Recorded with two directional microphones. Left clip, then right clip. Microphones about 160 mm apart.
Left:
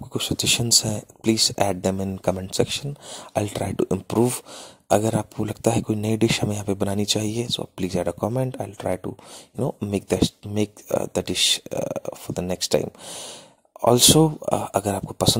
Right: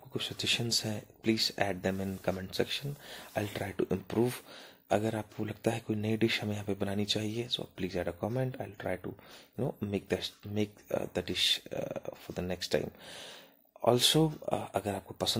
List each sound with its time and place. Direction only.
0.1 s speech: 50° left (ahead or behind)